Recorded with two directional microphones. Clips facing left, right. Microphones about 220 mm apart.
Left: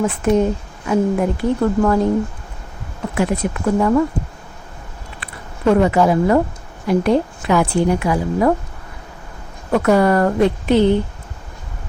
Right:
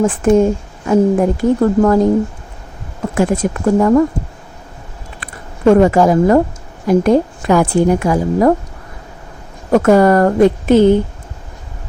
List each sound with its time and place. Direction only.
0.0 s a woman's voice: 50° right (ahead or behind)
3.7 s a woman's voice: 45° right (ahead or behind)
5.2 s a woman's voice: 45° right (ahead or behind)
9.7 s a woman's voice: 45° right (ahead or behind)